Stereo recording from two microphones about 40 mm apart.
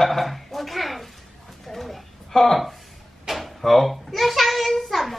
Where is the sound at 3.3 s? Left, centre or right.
Centre.